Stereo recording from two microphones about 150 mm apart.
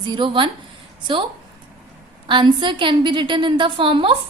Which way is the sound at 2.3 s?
30° right (ahead or behind).